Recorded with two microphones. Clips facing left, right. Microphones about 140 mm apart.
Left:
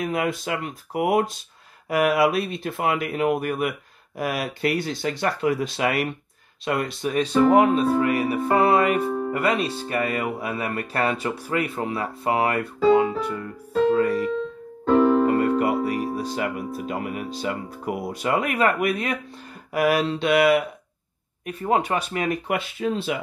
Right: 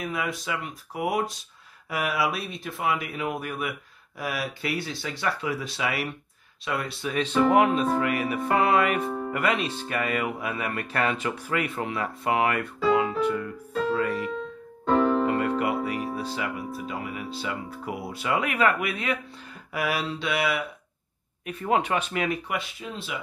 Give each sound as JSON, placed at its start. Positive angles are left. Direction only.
{"t": 0.0, "sound": "speech", "side_deg": 55}
{"t": 15.2, "sound": "music", "side_deg": 40}
{"t": 16.3, "sound": "speech", "side_deg": 50}
{"t": 21.5, "sound": "speech", "side_deg": 35}